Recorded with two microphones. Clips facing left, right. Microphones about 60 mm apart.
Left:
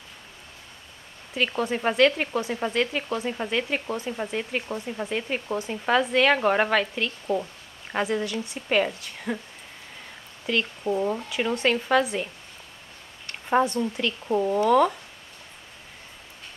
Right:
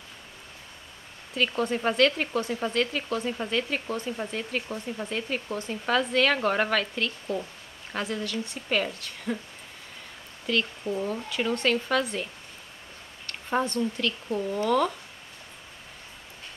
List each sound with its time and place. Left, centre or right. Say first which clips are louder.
1.3 s speech: left 1 dB; centre
10.4 s speech: left 2 dB; centre
13.3 s speech: left 5 dB; centre
14.2 s speech: left 8 dB; left